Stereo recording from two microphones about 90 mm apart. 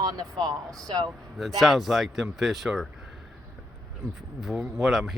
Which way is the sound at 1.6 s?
Centre (ahead or behind).